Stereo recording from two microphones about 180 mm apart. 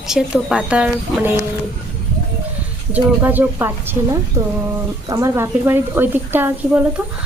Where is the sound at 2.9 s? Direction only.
10° right (ahead or behind).